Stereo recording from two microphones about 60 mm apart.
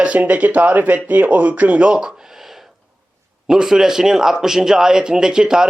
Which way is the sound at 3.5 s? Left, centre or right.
Centre.